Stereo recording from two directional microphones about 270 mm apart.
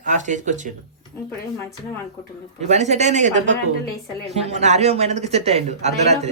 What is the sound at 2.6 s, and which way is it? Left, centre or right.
Speech, right.